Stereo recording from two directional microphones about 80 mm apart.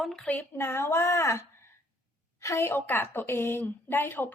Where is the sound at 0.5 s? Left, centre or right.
Left.